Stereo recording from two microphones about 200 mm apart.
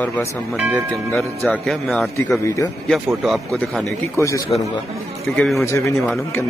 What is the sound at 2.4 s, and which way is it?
Speech, 15° left (ahead or behind).